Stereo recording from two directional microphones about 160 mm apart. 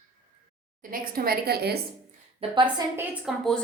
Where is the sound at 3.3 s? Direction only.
5° left (ahead or behind).